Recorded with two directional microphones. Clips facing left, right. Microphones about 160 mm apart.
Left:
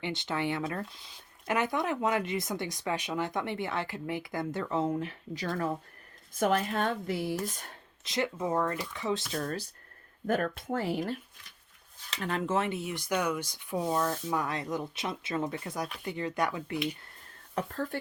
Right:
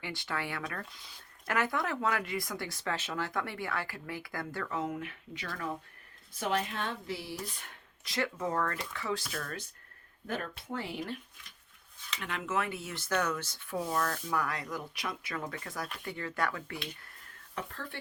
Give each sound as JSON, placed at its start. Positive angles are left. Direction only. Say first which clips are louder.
{"t": 0.0, "sound": "speech", "louder": "left 5 dB", "side_deg": 20}
{"t": 6.3, "sound": "speech", "louder": "left 5 dB", "side_deg": 45}
{"t": 8.0, "sound": "speech", "louder": "left 2 dB", "side_deg": 20}
{"t": 9.3, "sound": "speech", "louder": "left 6 dB", "side_deg": 35}
{"t": 10.2, "sound": "speech", "louder": "left 8 dB", "side_deg": 50}
{"t": 17.5, "sound": "speech", "louder": "left 8 dB", "side_deg": 40}